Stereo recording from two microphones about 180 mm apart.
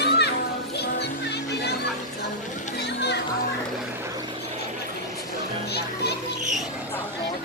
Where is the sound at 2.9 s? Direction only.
65° left (ahead or behind).